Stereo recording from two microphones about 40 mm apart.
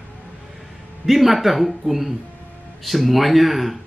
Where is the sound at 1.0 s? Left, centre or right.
Centre.